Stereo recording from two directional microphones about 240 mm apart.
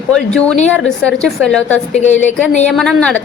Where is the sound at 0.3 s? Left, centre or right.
Centre.